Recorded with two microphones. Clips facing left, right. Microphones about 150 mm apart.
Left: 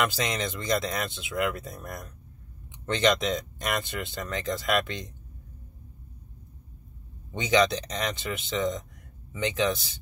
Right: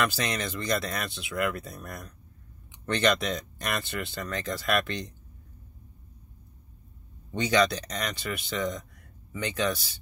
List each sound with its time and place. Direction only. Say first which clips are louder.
0.0 s speech: left 1 dB; 20° left (ahead or behind)
7.5 s speech: left 2 dB; 20° left (ahead or behind)